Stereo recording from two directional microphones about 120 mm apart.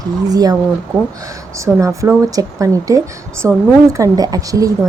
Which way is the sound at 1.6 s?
25° right (ahead or behind).